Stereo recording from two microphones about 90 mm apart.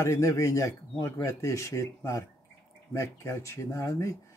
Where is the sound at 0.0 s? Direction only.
35° left (ahead or behind).